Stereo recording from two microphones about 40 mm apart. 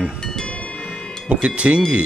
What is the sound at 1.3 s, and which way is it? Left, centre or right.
Speech, right.